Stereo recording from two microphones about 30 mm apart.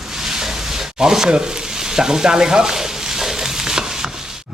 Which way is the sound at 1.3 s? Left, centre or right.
Right.